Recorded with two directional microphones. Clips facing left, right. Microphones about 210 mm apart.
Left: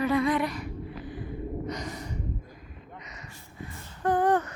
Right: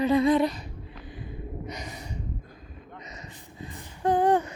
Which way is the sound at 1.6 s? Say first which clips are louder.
Left 3 dB; 10° right (ahead or behind).